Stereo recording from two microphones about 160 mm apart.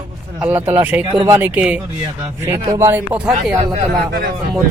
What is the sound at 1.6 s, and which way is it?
Speech, 5° right (ahead or behind).